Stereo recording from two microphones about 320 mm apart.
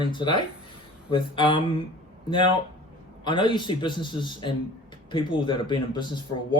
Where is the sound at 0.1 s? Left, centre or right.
Centre.